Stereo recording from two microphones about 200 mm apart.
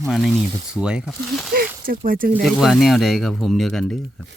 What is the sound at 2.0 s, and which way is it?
Speech, 45° right (ahead or behind).